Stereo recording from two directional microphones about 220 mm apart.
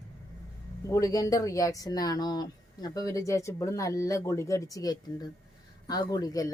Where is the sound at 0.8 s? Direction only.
15° left (ahead or behind).